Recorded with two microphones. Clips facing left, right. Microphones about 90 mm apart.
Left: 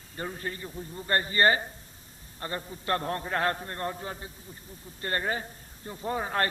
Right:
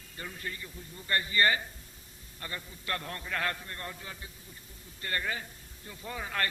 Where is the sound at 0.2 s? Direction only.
35° left (ahead or behind).